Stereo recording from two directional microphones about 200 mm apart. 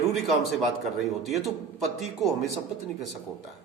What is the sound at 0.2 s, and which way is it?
Speech, centre (ahead or behind).